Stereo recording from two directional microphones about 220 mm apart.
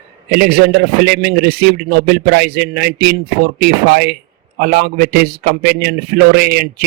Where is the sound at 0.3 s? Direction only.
45° right (ahead or behind).